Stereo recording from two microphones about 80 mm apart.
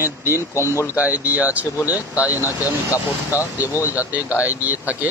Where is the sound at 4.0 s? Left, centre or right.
Right.